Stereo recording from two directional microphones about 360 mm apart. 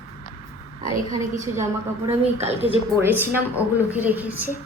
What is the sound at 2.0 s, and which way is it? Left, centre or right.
Speech, centre.